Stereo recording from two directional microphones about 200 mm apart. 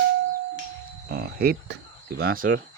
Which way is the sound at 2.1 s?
45° right (ahead or behind).